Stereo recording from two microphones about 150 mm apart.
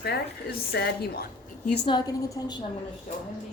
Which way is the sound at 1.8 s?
30° left (ahead or behind).